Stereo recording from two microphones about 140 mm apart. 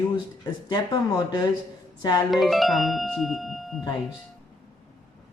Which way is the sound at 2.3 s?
Centre (ahead or behind).